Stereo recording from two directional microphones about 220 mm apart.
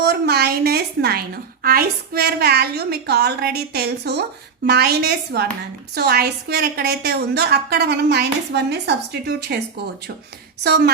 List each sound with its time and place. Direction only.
0.0 s a woman's voice: 50° right (ahead or behind)